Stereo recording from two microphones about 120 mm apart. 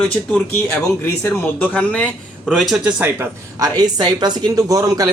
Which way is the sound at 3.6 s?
35° right (ahead or behind).